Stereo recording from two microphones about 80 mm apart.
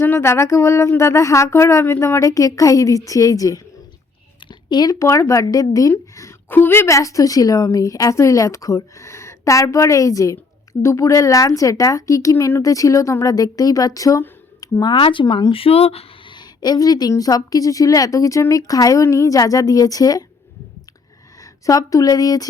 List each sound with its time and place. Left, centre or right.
0.0 s speech: left
4.4 s a sound: left
4.9 s a woman's voice: left
6.5 s a woman's voice: left
14.6 s a woman's voice: left
21.4 s a woman's voice: left